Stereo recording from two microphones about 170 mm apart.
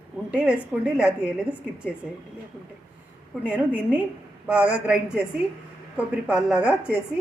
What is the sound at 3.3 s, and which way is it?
A woman's voice, 10° right (ahead or behind).